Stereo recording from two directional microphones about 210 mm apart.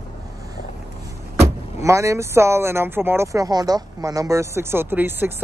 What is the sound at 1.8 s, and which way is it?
Speech, 15° right (ahead or behind).